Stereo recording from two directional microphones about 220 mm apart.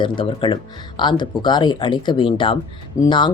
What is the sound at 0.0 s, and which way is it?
Speech, 20° left (ahead or behind).